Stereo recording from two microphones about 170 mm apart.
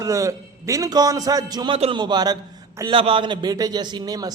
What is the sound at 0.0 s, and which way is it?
A man's voice, 20° right (ahead or behind).